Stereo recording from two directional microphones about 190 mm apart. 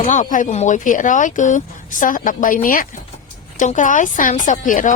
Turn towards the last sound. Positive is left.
turn(degrees=45)  # may be behind; listen again after turning